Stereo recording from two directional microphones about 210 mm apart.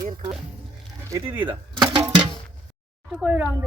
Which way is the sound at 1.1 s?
10° right (ahead or behind).